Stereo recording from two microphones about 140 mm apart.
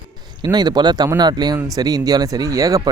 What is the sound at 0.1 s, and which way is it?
Speech, 30° right (ahead or behind).